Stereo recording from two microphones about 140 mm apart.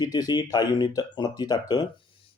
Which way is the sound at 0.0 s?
30° left (ahead or behind).